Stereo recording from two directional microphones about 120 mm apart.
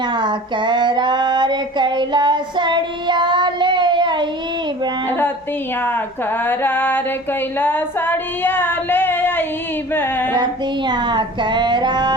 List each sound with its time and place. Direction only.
0.1 s a sound: 40° right (ahead or behind)
5.0 s a sound: 15° left (ahead or behind)
6.4 s music: 15° left (ahead or behind)
7.6 s female singing: 15° left (ahead or behind)
9.9 s music: 15° left (ahead or behind)
10.3 s child singing: 40° right (ahead or behind)